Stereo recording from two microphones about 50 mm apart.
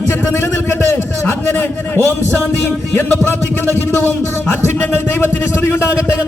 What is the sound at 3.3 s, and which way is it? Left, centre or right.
Music, left.